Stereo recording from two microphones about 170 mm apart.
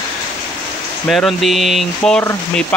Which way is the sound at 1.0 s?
Centre (ahead or behind).